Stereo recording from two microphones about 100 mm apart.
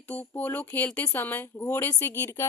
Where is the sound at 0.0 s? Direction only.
15° left (ahead or behind).